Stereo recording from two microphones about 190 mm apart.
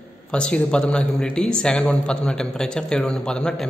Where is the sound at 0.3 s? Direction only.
5° left (ahead or behind).